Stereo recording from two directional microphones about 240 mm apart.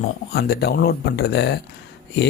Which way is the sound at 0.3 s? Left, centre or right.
Left.